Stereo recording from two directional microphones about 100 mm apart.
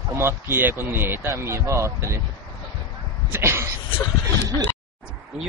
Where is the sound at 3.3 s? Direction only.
25° right (ahead or behind).